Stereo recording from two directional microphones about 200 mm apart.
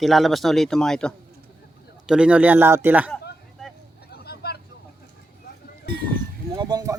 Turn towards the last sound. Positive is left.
turn(degrees=-20)  # may be behind; listen again after turning